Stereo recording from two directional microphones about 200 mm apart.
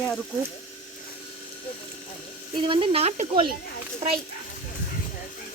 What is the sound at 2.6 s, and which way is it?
Speech, 25° right (ahead or behind).